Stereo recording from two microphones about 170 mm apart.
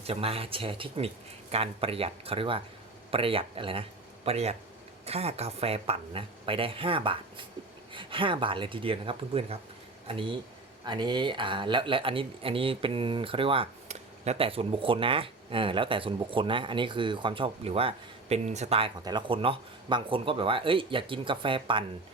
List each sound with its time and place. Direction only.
0.1 s speech: 35° right (ahead or behind)
19.0 s speech: 30° right (ahead or behind)